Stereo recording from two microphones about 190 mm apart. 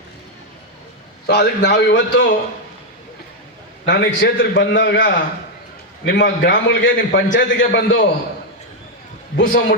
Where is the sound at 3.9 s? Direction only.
70° left (ahead or behind).